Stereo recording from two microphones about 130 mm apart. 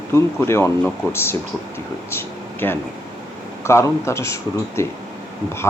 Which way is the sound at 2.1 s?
15° left (ahead or behind).